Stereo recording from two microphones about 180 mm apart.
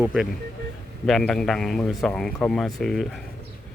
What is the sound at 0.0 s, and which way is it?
A man's voice, 5° right (ahead or behind).